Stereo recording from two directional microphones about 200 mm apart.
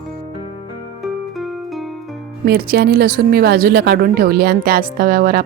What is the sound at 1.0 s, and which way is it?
Music, centre (ahead or behind).